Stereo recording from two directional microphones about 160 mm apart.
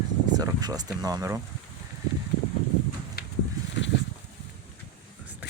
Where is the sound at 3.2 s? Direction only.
75° left (ahead or behind).